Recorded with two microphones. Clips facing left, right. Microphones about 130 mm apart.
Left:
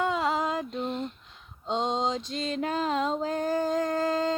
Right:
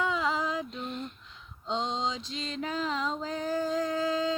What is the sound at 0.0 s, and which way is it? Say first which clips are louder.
Music: left 3 dB; 50° left (ahead or behind).